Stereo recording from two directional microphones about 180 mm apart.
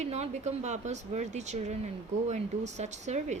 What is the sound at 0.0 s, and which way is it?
Speech, 40° right (ahead or behind).